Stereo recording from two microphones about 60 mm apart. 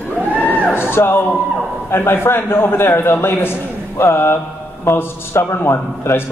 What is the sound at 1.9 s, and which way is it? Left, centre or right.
A man's voice, left.